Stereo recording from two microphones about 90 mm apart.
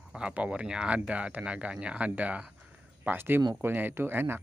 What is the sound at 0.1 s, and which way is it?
Speech, 10° right (ahead or behind).